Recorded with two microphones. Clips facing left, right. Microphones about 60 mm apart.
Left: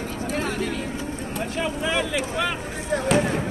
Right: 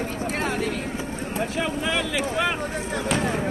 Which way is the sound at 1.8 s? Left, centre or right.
Centre.